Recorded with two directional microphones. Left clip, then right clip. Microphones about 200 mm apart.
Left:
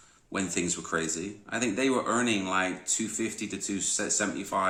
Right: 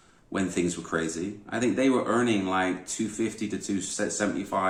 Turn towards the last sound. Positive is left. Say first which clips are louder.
# right 1 dB
turn(degrees=20)  # may be behind; listen again after turning